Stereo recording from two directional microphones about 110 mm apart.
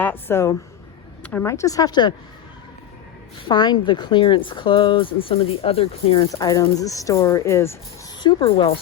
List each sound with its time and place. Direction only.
0.0 s a woman's voice: 20° left (ahead or behind)
1.5 s speech: 30° left (ahead or behind)
3.5 s speech: 45° left (ahead or behind); by 6.2 s 65° left (ahead or behind)
6.2 s speech: 30° left (ahead or behind)
8.2 s speech: 50° left (ahead or behind)